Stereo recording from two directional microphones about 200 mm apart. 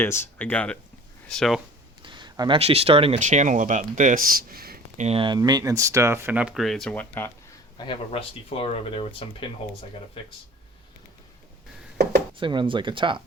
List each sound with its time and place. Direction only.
0.0 s speech: 10° left (ahead or behind)
2.0 s a sound: 25° right (ahead or behind)
2.6 s speech: 30° right (ahead or behind); by 5.0 s 50° right (ahead or behind)
5.0 s speech: 25° right (ahead or behind); by 7.3 s 10° left (ahead or behind)
7.8 s speech: 25° left (ahead or behind)
12.4 s speech: 25° right (ahead or behind)